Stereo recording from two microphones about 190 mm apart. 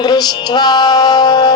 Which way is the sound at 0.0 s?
20° left (ahead or behind).